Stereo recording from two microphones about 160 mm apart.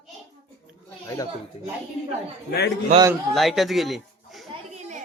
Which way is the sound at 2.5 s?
90° left.